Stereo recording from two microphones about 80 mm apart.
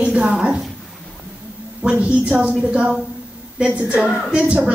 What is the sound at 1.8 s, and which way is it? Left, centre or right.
A woman's voice, centre.